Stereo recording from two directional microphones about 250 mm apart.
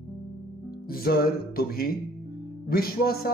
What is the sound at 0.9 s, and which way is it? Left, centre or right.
Speech, left.